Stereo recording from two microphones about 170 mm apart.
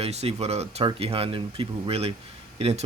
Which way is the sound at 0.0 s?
40° right (ahead or behind).